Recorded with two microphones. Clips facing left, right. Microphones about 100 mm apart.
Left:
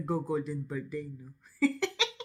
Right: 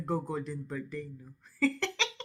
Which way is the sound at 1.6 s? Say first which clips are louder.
Left 2 dB; 5° left (ahead or behind).